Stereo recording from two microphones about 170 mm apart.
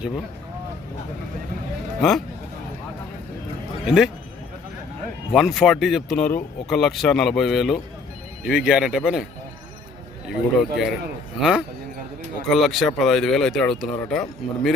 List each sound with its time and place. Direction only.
2.0 s speech: centre (ahead or behind)
3.8 s speech: 5° right (ahead or behind)
5.3 s speech: centre (ahead or behind)
10.2 s speech: centre (ahead or behind)